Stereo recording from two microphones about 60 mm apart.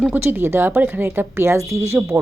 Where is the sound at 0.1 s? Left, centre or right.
Right.